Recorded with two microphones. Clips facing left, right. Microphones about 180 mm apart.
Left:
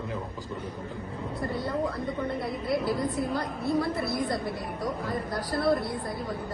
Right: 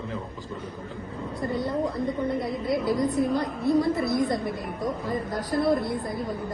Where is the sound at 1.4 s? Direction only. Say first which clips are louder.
Right 4 dB; 20° right (ahead or behind).